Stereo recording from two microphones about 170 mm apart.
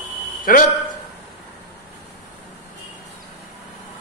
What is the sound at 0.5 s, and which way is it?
Speech, 55° left (ahead or behind).